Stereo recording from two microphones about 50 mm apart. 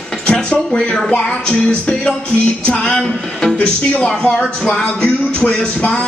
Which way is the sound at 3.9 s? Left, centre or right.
Centre.